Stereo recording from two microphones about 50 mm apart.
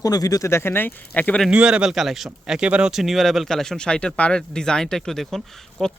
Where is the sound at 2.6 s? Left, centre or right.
Right.